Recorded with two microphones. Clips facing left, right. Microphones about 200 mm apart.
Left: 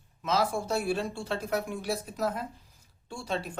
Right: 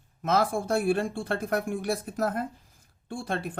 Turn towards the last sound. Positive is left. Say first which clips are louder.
# right 2 dB
turn(degrees=-55)  # may be behind; listen again after turning